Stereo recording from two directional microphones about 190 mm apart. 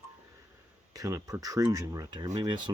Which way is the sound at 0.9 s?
15° right (ahead or behind).